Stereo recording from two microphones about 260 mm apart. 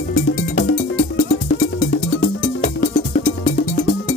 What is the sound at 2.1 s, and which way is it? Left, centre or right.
Music, left.